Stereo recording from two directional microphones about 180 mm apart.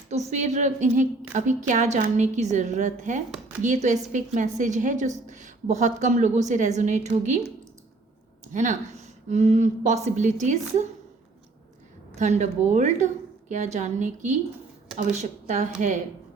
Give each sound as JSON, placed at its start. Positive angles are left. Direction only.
{"t": 0.1, "sound": "a woman's voice", "side_deg": -40}
{"t": 8.5, "sound": "a woman's voice", "side_deg": -40}
{"t": 12.1, "sound": "a woman's voice", "side_deg": -40}